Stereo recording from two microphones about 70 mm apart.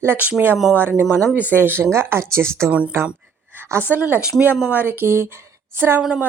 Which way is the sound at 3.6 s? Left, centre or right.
Right.